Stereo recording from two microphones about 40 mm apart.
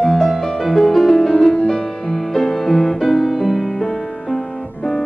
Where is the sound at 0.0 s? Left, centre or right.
Centre.